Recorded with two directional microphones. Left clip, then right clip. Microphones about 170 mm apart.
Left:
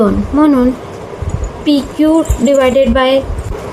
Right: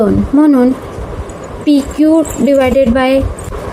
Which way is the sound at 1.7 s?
25° right (ahead or behind).